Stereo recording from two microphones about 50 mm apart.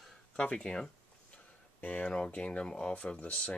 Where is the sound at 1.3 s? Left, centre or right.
Left.